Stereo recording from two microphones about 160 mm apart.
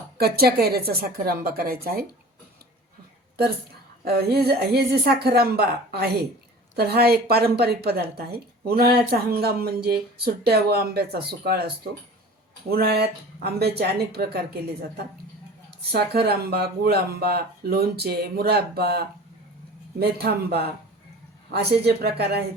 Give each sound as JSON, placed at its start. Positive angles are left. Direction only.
{"t": 0.2, "sound": "speech", "side_deg": -75}
{"t": 4.0, "sound": "speech", "side_deg": -80}
{"t": 12.7, "sound": "a woman's voice", "side_deg": -90}